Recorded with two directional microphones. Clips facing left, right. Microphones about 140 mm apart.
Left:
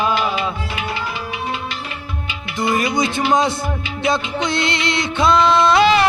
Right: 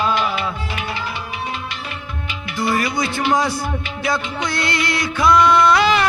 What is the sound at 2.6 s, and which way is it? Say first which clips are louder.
Speech: left 2 dB; 20° left (ahead or behind).